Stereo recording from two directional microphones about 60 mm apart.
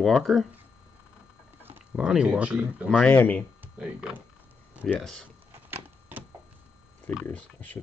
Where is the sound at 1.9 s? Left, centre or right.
Centre.